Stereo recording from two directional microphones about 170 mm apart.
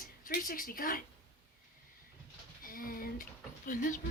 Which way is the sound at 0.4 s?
55° left (ahead or behind).